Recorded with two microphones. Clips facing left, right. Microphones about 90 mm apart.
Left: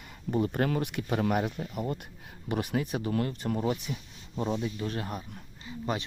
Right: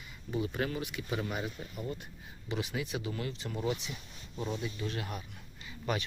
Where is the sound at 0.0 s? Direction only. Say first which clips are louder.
Left 6 dB; 55° left (ahead or behind).